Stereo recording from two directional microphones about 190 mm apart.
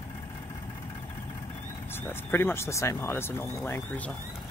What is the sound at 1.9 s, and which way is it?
Speech, 10° left (ahead or behind).